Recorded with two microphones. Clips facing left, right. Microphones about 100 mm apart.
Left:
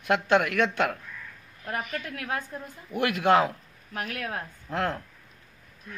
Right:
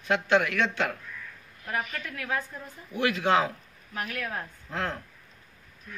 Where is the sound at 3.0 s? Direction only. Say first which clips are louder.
Left 2 dB; 55° left (ahead or behind).